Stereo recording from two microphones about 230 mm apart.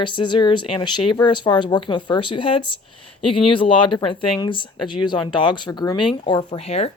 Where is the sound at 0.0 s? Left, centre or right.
Left.